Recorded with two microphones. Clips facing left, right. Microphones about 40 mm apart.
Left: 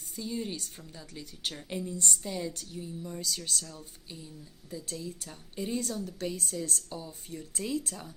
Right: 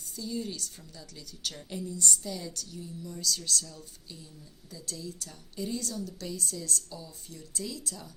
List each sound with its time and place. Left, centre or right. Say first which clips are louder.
0.2 s a woman's voice: even; left